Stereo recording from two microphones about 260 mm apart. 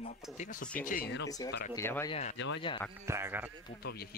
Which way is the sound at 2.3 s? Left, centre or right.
Left.